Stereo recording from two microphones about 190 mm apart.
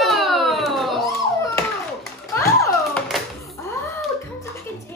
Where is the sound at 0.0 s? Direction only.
Centre (ahead or behind).